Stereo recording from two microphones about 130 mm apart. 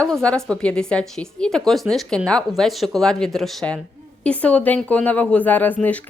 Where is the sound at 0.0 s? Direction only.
5° left (ahead or behind).